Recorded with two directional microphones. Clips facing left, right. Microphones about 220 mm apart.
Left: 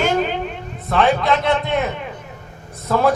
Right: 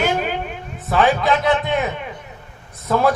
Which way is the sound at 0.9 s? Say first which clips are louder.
Even; centre (ahead or behind).